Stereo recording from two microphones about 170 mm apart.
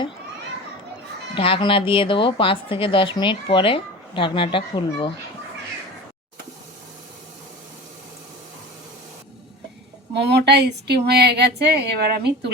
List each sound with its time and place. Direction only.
1.4 s a woman's voice: 30° left (ahead or behind)
10.2 s speech: 85° right